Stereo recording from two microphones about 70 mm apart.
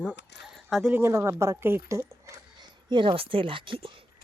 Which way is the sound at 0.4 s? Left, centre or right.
Centre.